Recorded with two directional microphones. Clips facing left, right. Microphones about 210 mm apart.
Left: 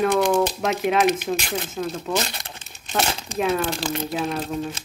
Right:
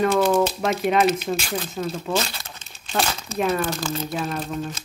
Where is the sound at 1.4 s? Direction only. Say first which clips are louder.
Even; 20° left (ahead or behind).